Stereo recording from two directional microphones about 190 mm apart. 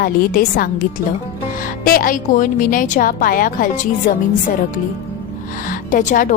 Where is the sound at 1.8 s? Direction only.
50° left (ahead or behind).